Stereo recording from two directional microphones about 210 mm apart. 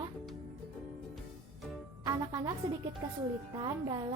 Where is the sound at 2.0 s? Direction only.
15° right (ahead or behind).